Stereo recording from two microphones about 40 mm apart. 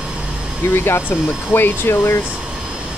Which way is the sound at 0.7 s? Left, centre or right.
Left.